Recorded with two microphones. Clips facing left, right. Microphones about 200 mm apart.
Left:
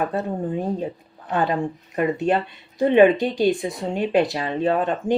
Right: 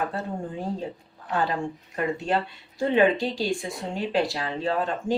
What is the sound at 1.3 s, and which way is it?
Speech, 20° left (ahead or behind).